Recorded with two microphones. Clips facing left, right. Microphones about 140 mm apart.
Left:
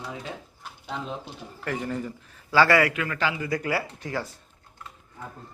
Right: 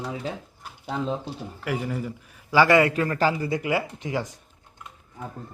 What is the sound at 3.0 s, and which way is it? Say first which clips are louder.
Speech: right 5 dB; 40° right (ahead or behind).